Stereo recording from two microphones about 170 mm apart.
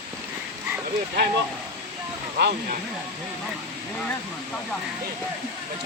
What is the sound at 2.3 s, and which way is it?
Speech, 60° right (ahead or behind).